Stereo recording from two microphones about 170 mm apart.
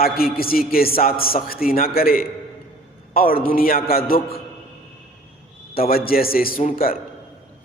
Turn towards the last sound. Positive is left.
turn(degrees=55)  # may be behind; listen again after turning